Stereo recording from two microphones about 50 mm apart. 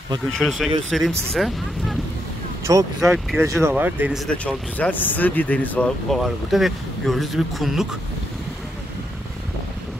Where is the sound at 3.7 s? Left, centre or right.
Right.